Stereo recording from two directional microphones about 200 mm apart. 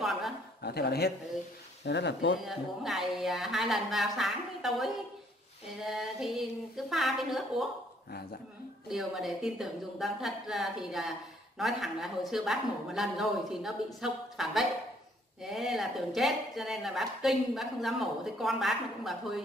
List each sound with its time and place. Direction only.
0.0 s a sound: centre (ahead or behind)
0.6 s speech: 55° left (ahead or behind)
2.4 s a woman's voice: centre (ahead or behind)
8.8 s a woman's voice: centre (ahead or behind)